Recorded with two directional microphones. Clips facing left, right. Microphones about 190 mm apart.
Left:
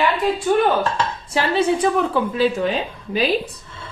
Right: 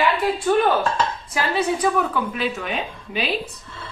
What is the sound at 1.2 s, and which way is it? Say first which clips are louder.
Speech: left 7 dB; 30° left (ahead or behind).